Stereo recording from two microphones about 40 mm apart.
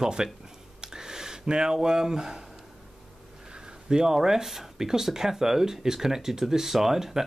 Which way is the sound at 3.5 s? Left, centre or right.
Centre.